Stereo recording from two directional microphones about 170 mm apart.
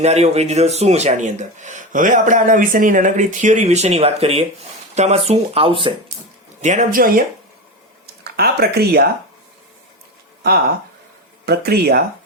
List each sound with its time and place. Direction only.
0.0 s speech: 40° right (ahead or behind)
6.6 s speech: 45° right (ahead or behind)
8.2 s speech: 70° right (ahead or behind)
11.4 s speech: 65° right (ahead or behind)